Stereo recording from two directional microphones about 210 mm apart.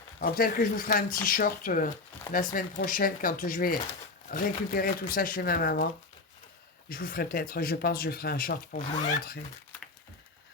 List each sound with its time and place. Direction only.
0.2 s speech: 45° left (ahead or behind)